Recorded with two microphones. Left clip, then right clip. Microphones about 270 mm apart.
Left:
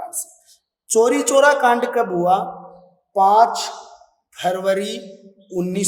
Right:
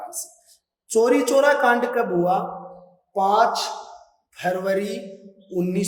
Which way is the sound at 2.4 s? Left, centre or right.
Centre.